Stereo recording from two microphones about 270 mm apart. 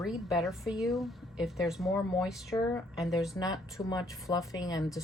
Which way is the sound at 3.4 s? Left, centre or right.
Centre.